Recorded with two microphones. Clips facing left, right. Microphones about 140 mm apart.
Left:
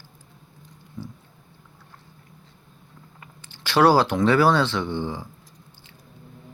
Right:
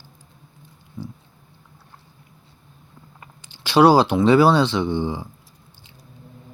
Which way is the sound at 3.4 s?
15° right (ahead or behind).